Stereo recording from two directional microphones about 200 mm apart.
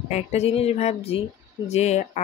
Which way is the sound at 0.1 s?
35° left (ahead or behind).